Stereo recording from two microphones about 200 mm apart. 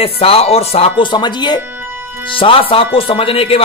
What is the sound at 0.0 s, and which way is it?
Speech, 30° left (ahead or behind).